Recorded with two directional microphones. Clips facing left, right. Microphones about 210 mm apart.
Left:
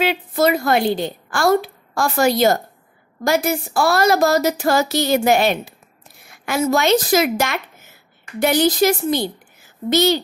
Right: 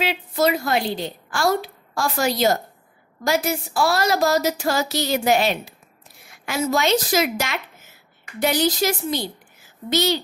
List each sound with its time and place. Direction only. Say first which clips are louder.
0.0 s a woman's voice: left 3 dB; 55° left (ahead or behind)